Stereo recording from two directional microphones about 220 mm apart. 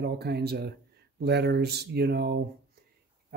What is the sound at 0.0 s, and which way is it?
Speech, 45° right (ahead or behind).